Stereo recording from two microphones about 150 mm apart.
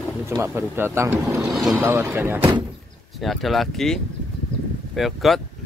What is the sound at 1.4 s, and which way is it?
Speech, centre (ahead or behind).